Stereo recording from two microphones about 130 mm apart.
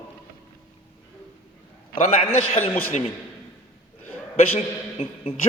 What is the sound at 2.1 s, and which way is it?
Speech, 55° left (ahead or behind).